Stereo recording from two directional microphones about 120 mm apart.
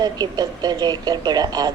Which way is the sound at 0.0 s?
35° right (ahead or behind).